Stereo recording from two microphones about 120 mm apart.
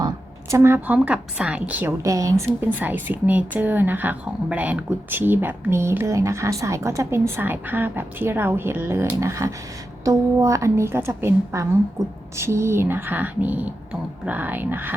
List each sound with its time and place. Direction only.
0.5 s a woman's voice: 20° right (ahead or behind)
2.0 s a woman's voice: 30° right (ahead or behind)
2.6 s a woman's voice: 15° right (ahead or behind)